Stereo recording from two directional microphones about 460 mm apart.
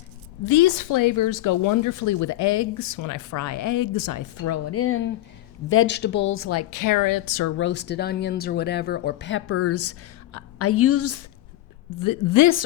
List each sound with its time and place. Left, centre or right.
0.4 s speech: left
7.5 s speech: left
11.9 s a woman's voice: left